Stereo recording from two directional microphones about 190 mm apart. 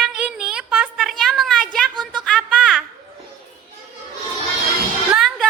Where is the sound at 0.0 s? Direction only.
5° right (ahead or behind).